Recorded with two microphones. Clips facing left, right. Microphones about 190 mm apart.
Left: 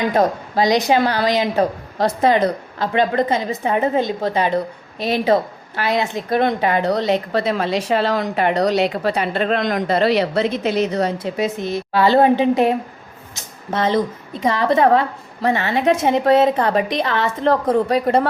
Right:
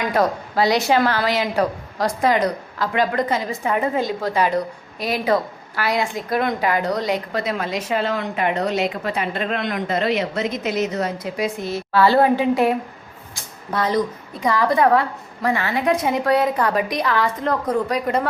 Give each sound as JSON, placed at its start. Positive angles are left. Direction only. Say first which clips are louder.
{"t": 0.1, "sound": "a woman's voice", "louder": "left 2 dB", "side_deg": 20}
{"t": 13.7, "sound": "a woman's voice", "louder": "left 2 dB", "side_deg": 25}